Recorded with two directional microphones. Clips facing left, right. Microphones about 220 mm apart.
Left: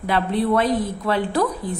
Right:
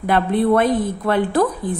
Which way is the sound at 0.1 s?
50° right (ahead or behind).